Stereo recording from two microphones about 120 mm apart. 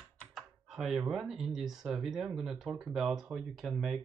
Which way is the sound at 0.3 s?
Centre (ahead or behind).